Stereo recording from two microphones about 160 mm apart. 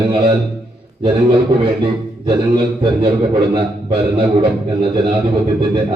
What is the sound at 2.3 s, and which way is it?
A man's voice, 25° right (ahead or behind).